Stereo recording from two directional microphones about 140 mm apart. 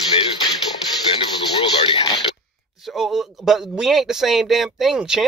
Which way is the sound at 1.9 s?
40° left (ahead or behind).